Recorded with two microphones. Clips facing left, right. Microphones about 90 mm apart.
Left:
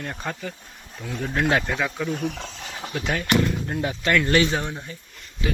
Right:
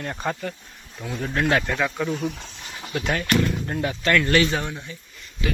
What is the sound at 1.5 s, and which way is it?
Speech, 5° left (ahead or behind).